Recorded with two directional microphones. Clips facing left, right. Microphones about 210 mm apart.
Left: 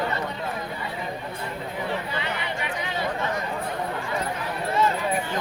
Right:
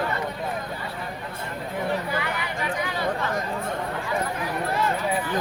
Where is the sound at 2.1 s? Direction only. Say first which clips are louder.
Right 1 dB; 25° left (ahead or behind).